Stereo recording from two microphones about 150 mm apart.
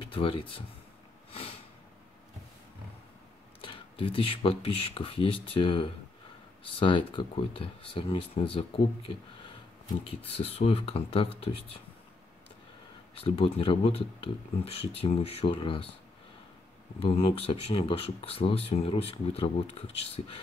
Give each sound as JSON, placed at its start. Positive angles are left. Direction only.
{"t": 0.0, "sound": "speech", "side_deg": 35}
{"t": 3.6, "sound": "speech", "side_deg": 35}
{"t": 13.2, "sound": "speech", "side_deg": 40}
{"t": 17.0, "sound": "speech", "side_deg": 40}